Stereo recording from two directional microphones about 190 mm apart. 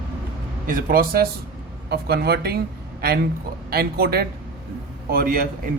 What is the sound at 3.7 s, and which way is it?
A man's voice, 50° right (ahead or behind).